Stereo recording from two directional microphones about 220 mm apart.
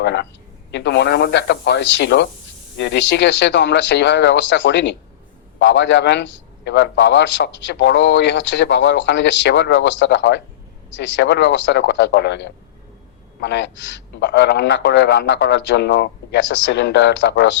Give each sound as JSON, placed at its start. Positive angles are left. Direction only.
{"t": 0.0, "sound": "a man's voice", "side_deg": 50}